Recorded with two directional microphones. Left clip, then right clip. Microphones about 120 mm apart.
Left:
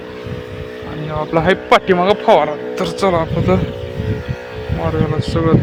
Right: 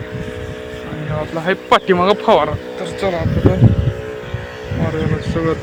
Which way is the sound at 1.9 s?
15° right (ahead or behind).